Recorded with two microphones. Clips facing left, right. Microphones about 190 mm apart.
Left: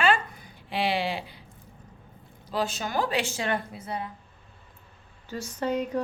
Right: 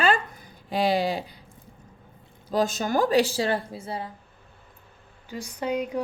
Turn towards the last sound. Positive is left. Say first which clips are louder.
# even
turn(degrees=-10)  # may be behind; listen again after turning